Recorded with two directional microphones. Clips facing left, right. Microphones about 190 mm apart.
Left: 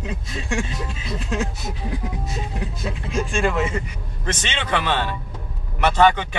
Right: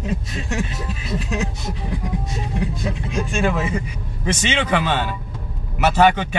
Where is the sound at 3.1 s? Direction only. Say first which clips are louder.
Even; centre (ahead or behind).